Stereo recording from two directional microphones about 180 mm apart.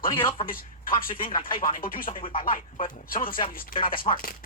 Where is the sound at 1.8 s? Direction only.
50° left (ahead or behind).